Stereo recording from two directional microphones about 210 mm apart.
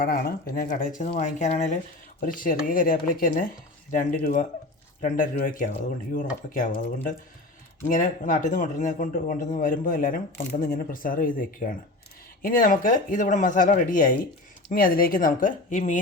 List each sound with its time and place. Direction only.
0.0 s speech: 45° left (ahead or behind)